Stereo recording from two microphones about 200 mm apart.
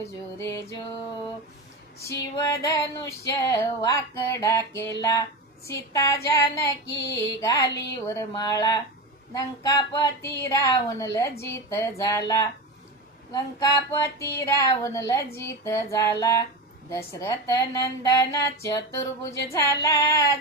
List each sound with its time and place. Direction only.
0.0 s speech: 15° left (ahead or behind)
2.4 s speech: 15° left (ahead or behind)